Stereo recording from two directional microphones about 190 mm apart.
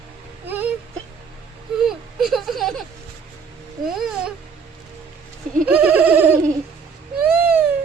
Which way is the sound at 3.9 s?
5° right (ahead or behind).